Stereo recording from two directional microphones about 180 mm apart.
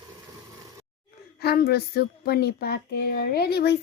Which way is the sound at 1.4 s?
60° left (ahead or behind).